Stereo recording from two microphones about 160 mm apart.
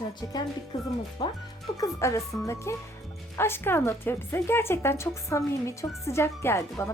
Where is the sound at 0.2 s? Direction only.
25° left (ahead or behind).